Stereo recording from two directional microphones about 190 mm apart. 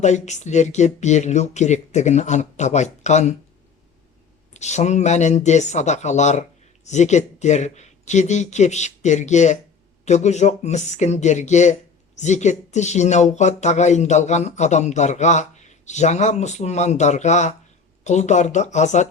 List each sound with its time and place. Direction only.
0.0 s speech: 40° left (ahead or behind)
4.5 s speech: 40° left (ahead or behind)